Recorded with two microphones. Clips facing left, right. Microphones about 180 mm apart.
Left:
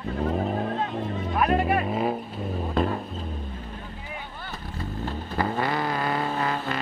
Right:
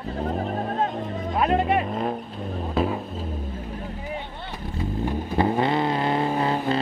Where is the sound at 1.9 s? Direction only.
5° left (ahead or behind).